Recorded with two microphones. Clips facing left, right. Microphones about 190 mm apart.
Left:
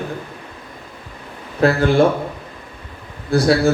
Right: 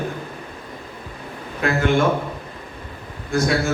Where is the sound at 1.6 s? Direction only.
35° left (ahead or behind).